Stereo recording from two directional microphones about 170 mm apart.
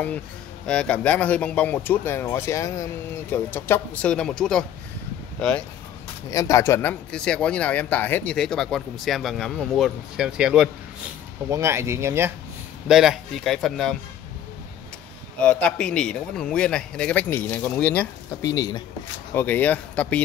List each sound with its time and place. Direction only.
0.7 s speech: 5° left (ahead or behind)
6.3 s speech: 20° left (ahead or behind); by 10.7 s 5° right (ahead or behind)
11.5 s speech: 15° right (ahead or behind)
12.8 s speech: 5° right (ahead or behind)
15.4 s speech: 10° left (ahead or behind)
18.4 s speech: 20° left (ahead or behind)